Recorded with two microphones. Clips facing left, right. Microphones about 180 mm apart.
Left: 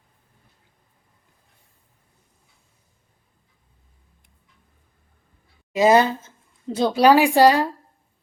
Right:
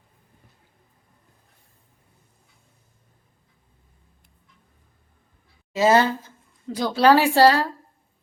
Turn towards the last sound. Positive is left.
turn(degrees=15)  # may be behind; listen again after turning